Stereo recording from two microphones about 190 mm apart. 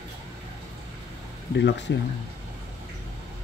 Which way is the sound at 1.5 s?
70° left (ahead or behind).